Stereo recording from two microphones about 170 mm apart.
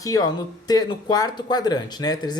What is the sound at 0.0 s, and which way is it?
Speech, 20° left (ahead or behind).